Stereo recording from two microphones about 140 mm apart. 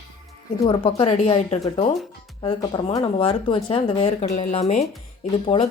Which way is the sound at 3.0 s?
40° left (ahead or behind).